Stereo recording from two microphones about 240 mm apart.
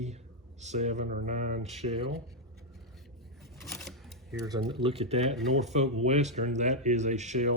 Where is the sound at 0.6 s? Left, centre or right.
Right.